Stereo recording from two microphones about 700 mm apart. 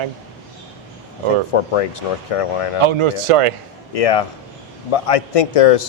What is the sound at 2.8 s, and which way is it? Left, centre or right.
Speech, right.